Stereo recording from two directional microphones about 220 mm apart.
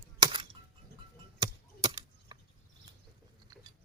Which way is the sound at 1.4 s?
20° right (ahead or behind).